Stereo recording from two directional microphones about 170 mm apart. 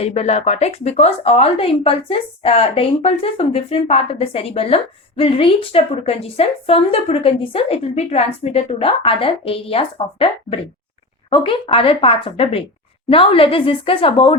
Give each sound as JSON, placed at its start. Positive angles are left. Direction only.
{"t": 0.0, "sound": "speech", "side_deg": 40}